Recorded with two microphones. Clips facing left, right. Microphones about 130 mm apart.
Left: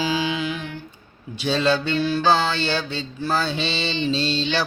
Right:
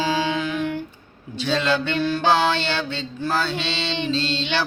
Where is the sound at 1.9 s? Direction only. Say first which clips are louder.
Left 1 dB; 55° right (ahead or behind).